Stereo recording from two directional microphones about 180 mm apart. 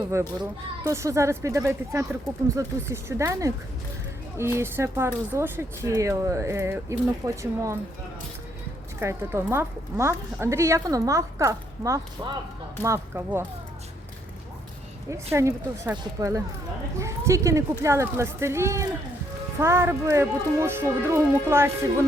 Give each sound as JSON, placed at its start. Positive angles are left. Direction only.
{"t": 0.1, "sound": "speech", "side_deg": -15}
{"t": 9.0, "sound": "speech", "side_deg": -15}
{"t": 15.1, "sound": "speech", "side_deg": -15}